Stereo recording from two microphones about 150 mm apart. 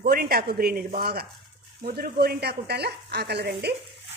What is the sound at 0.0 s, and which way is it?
Speech, 80° right.